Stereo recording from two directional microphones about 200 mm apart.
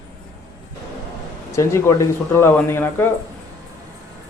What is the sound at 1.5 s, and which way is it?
Speech, 15° left (ahead or behind).